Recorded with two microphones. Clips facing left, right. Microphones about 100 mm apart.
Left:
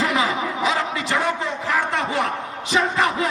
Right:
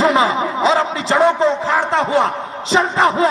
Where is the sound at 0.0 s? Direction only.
30° right (ahead or behind).